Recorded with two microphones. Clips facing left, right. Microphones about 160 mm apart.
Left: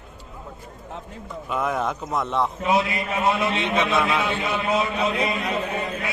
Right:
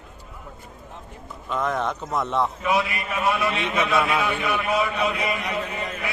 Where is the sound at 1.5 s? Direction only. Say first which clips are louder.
Even; 5° left (ahead or behind).